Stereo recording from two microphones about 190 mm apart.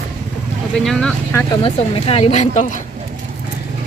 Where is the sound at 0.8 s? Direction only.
Centre (ahead or behind).